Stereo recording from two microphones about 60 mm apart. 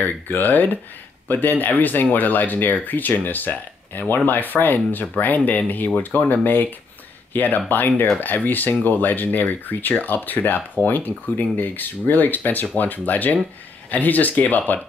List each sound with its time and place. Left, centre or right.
0.0 s speech: left